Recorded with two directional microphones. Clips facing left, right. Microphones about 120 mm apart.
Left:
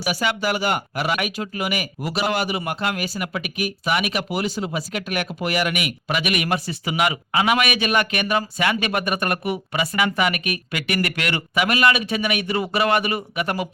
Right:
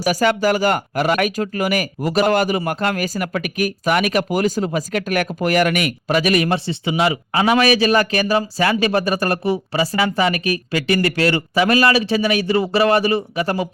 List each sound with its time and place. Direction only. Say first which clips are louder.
0.0 s speech: right 7 dB; 40° right (ahead or behind)